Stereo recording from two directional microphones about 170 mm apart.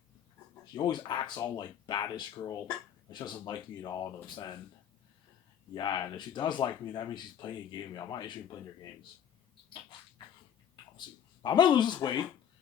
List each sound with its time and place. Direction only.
0.6 s speech: 25° left (ahead or behind)
5.7 s speech: 25° left (ahead or behind)
11.4 s speech: 25° left (ahead or behind)